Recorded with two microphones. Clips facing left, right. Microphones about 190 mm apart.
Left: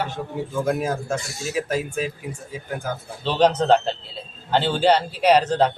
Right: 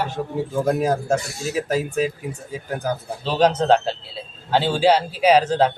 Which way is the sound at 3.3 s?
10° right (ahead or behind).